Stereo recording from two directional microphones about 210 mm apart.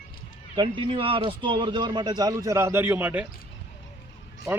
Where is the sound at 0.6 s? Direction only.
25° right (ahead or behind); by 3.2 s 10° right (ahead or behind).